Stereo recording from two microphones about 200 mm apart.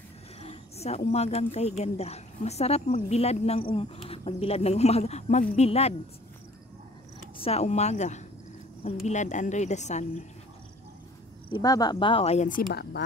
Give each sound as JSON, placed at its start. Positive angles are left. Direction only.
{"t": 0.4, "sound": "speech", "side_deg": 30}
{"t": 7.3, "sound": "speech", "side_deg": 30}
{"t": 11.5, "sound": "speech", "side_deg": 20}